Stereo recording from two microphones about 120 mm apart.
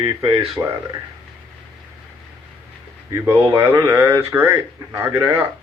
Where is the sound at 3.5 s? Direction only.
15° right (ahead or behind).